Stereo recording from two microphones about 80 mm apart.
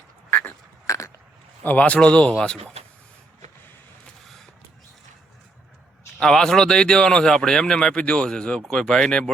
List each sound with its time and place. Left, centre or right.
0.3 s a sound: left
0.9 s biting: left
1.6 s speech: centre
6.1 s speech: centre